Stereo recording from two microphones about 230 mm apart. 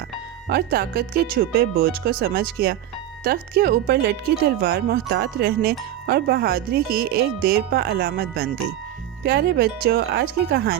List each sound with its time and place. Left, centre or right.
0.4 s speech: right